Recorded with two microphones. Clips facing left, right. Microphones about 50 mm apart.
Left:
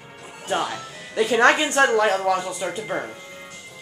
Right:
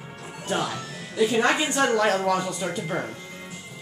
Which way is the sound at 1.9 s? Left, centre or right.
Centre.